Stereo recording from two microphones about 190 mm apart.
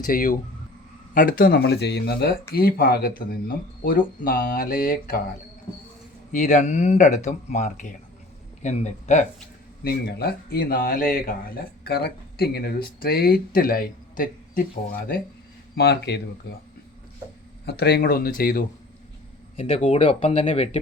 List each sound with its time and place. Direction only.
0.0 s speech: 45° left (ahead or behind)
6.3 s speech: 40° left (ahead or behind)
9.8 s speech: 60° left (ahead or behind)
15.7 s speech: 60° left (ahead or behind)
17.7 s speech: 60° left (ahead or behind)
19.5 s speech: 30° left (ahead or behind)